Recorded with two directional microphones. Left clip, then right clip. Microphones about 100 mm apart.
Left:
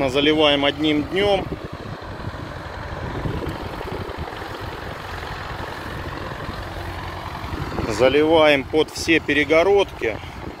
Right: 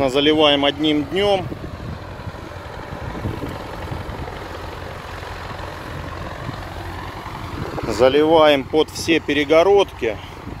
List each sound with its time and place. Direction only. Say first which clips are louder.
0.0 s speech: right 2 dB; 50° right (ahead or behind); by 1.4 s 30° right (ahead or behind)
7.9 s speech: right 2 dB; 40° right (ahead or behind)
9.5 s speech: right 4 dB; 50° right (ahead or behind)